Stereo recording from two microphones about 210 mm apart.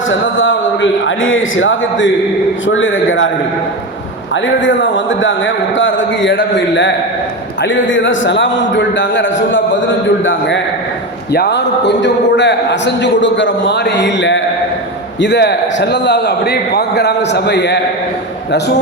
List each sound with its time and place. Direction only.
0.1 s a man's voice: 65° left (ahead or behind)
4.6 s a man's voice: 60° left (ahead or behind)